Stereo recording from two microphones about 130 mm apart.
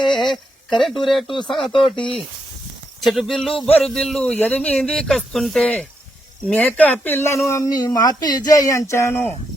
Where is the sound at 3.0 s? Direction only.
Centre (ahead or behind); by 9.3 s 15° left (ahead or behind).